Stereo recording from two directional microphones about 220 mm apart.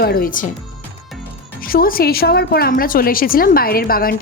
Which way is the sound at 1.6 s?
40° left (ahead or behind).